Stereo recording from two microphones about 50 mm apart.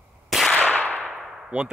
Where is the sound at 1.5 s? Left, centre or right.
Right.